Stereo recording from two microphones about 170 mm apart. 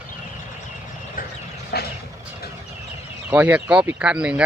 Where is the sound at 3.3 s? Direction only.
10° right (ahead or behind).